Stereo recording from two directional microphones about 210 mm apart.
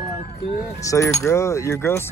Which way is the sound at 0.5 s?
15° left (ahead or behind).